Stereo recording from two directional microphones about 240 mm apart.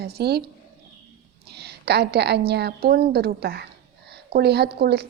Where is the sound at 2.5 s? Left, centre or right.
Right.